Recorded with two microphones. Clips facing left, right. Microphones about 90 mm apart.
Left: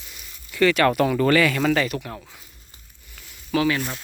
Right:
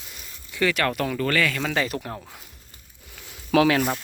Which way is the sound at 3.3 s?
75° right (ahead or behind).